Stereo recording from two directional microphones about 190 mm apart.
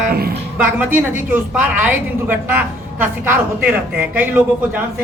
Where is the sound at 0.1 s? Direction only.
55° right (ahead or behind).